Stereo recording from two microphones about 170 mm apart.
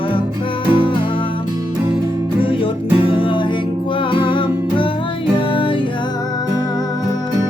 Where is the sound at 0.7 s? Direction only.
30° left (ahead or behind).